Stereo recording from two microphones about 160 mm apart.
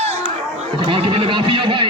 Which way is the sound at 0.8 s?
35° right (ahead or behind).